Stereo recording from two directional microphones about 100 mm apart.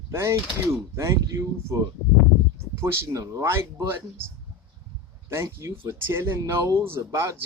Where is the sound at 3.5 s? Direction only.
25° right (ahead or behind).